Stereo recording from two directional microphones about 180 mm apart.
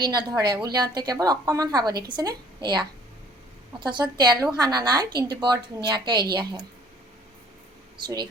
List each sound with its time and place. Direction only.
0.0 s a woman's voice: 25° right (ahead or behind)
7.9 s a woman's voice: 25° right (ahead or behind)